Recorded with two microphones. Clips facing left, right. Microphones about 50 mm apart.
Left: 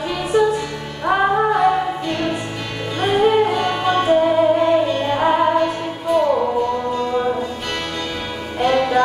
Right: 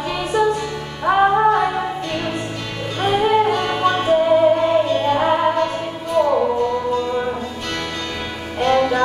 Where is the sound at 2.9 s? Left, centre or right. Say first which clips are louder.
Left 1 dB; centre.